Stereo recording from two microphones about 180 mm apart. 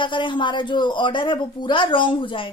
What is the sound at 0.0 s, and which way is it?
A woman's voice, 25° left (ahead or behind).